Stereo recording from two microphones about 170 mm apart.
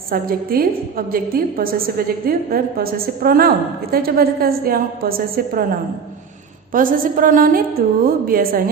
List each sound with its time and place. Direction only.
0.1 s a woman's voice: 60° right (ahead or behind)
6.7 s a woman's voice: 55° right (ahead or behind)